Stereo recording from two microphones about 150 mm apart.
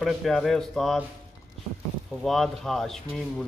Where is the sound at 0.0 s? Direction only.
Centre (ahead or behind).